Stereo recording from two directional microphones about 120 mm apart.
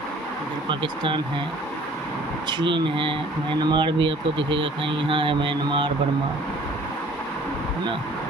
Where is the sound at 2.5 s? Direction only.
40° right (ahead or behind).